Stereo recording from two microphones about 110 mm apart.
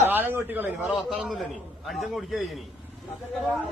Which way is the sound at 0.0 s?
20° right (ahead or behind).